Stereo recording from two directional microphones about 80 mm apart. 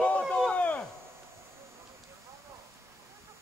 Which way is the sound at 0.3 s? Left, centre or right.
Centre.